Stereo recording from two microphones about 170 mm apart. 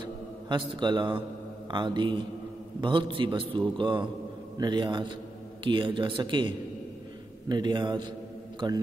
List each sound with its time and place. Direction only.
0.0 s a man's voice: 25° right (ahead or behind)